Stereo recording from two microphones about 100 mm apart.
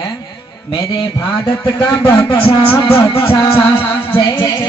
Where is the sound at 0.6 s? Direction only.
60° left (ahead or behind).